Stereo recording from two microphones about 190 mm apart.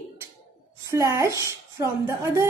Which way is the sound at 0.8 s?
15° right (ahead or behind).